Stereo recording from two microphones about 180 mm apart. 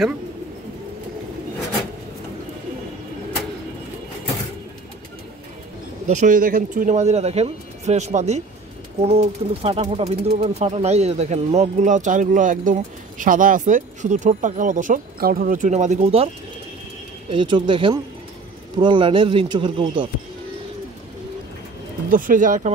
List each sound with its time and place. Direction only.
6.0 s speech: 45° right (ahead or behind)
17.3 s speech: 25° right (ahead or behind)
22.1 s speech: 50° right (ahead or behind)